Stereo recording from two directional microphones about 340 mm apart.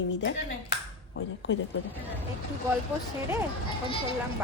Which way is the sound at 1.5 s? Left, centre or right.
Left.